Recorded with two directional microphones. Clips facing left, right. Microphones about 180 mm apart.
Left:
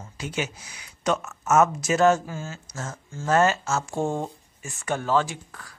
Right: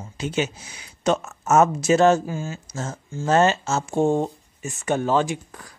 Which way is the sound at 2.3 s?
15° right (ahead or behind).